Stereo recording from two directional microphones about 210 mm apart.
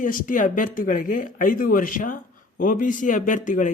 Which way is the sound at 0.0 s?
40° left (ahead or behind).